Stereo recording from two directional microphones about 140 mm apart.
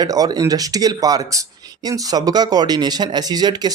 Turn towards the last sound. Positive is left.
turn(degrees=-30)  # may be behind; listen again after turning